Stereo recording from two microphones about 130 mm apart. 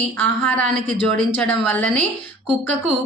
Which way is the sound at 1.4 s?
10° left (ahead or behind).